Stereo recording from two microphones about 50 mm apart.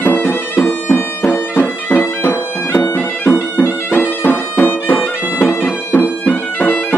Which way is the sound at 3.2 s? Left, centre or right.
Left.